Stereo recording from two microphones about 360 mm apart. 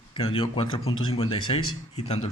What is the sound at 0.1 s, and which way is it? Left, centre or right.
Speech, centre.